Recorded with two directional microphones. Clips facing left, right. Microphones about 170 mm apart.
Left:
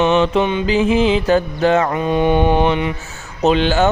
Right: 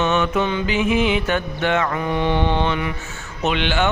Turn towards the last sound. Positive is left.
turn(degrees=40)  # may be behind; listen again after turning